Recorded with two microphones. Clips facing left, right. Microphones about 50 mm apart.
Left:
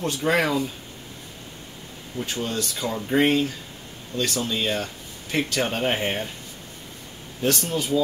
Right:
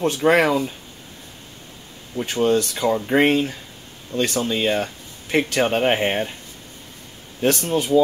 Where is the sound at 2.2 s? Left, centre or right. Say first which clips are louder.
Right 10 dB; right.